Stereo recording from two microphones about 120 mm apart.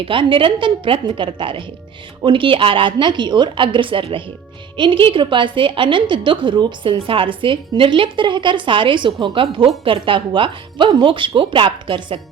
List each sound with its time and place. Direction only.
0.0 s a woman's voice: 45° right (ahead or behind)